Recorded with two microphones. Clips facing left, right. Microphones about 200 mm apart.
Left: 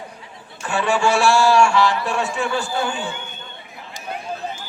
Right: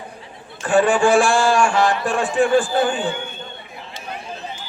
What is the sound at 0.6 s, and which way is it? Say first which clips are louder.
A man's voice: right 5 dB; 50° right (ahead or behind).